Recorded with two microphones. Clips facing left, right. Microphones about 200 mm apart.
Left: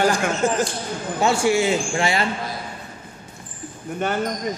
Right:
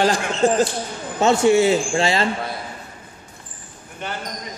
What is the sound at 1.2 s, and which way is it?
Speech, 20° right (ahead or behind).